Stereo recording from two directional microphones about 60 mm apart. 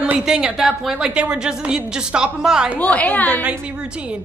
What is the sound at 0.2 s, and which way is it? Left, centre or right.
A woman's voice, centre.